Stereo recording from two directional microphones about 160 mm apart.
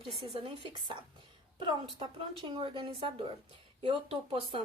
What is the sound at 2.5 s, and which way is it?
Speech, 30° right (ahead or behind).